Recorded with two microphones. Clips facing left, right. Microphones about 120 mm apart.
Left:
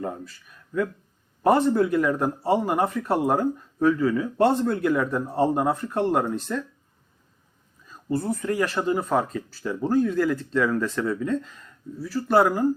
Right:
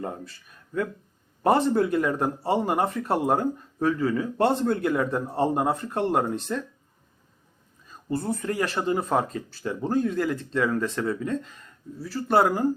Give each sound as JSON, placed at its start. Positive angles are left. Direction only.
{"t": 0.0, "sound": "speech", "side_deg": -30}
{"t": 8.2, "sound": "speech", "side_deg": -30}